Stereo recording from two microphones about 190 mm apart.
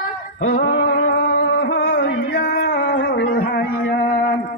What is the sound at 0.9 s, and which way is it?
Music, 55° left (ahead or behind).